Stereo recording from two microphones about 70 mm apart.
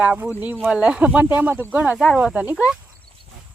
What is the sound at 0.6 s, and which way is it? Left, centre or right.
Speech, centre.